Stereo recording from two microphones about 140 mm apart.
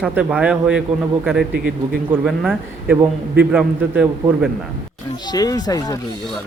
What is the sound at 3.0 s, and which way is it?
A man's voice, 10° right (ahead or behind).